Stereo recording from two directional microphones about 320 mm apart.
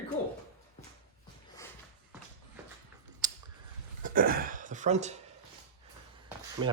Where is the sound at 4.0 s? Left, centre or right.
Right.